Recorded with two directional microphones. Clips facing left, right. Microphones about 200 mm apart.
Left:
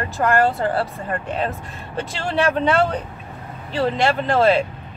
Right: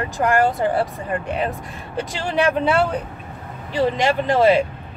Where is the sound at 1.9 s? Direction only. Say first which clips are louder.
Right 1 dB; 15° right (ahead or behind).